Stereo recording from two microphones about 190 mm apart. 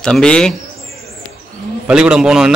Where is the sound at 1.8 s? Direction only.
5° right (ahead or behind).